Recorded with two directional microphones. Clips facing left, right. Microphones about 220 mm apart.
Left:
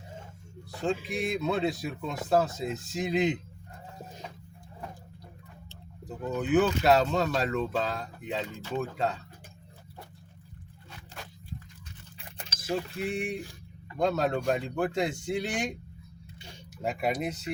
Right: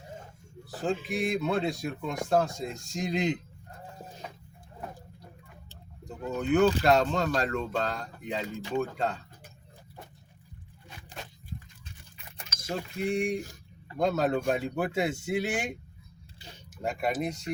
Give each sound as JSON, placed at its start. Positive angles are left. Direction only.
{"t": 0.9, "sound": "speech", "side_deg": 0}
{"t": 6.1, "sound": "speech", "side_deg": 5}
{"t": 11.2, "sound": "dog", "side_deg": -20}
{"t": 12.1, "sound": "a sound", "side_deg": 30}
{"t": 12.6, "sound": "speech", "side_deg": 0}
{"t": 13.3, "sound": "speech", "side_deg": -45}
{"t": 14.0, "sound": "speech", "side_deg": 0}
{"t": 16.8, "sound": "speech", "side_deg": 0}